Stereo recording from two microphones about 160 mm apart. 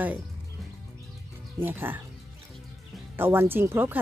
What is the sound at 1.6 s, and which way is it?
Speech, 10° right (ahead or behind).